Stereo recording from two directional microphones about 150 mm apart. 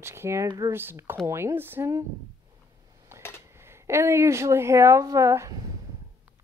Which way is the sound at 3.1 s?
15° right (ahead or behind).